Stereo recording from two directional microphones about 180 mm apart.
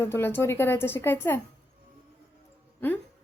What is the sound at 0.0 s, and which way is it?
A woman's voice, 15° left (ahead or behind).